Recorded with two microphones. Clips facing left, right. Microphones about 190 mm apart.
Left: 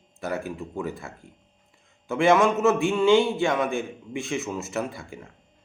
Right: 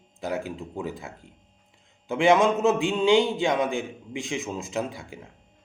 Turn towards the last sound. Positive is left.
turn(degrees=-15)  # may be behind; listen again after turning